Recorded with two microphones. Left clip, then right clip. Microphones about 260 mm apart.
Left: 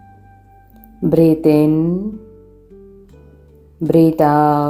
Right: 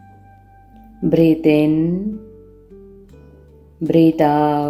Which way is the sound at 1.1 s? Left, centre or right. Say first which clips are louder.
Left 2 dB; centre.